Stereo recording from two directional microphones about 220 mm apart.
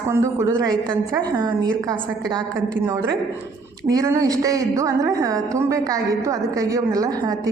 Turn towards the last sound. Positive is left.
turn(degrees=-15)  # may be behind; listen again after turning